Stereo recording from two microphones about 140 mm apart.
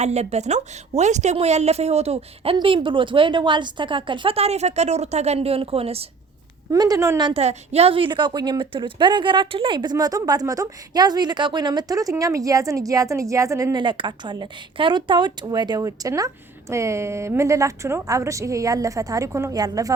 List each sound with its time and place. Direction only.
0.0 s a woman's voice: 50° right (ahead or behind)
6.7 s a woman's voice: 25° right (ahead or behind)
7.3 s a woman's voice: 45° right (ahead or behind); by 13.7 s 20° right (ahead or behind)
13.7 s a woman's voice: 35° right (ahead or behind)